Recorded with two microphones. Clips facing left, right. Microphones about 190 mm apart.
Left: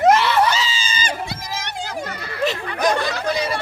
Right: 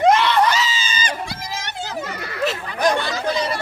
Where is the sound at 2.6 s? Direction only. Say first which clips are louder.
Right 2 dB; 65° left (ahead or behind).